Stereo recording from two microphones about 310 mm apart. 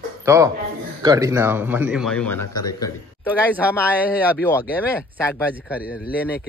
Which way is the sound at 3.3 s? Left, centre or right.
Centre.